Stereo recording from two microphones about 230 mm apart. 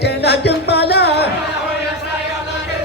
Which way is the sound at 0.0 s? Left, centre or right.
Left.